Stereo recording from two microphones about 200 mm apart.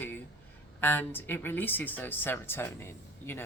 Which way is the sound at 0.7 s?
10° left (ahead or behind).